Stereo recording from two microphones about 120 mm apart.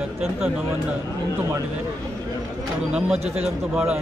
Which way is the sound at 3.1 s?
60° right (ahead or behind).